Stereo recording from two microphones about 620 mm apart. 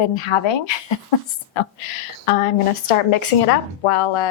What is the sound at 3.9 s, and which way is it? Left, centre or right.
Speech, left.